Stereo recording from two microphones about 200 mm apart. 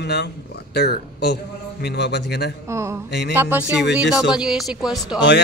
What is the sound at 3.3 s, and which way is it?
Speech, 10° right (ahead or behind).